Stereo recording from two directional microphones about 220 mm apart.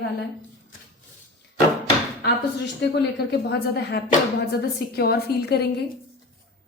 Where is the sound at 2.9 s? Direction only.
50° left (ahead or behind).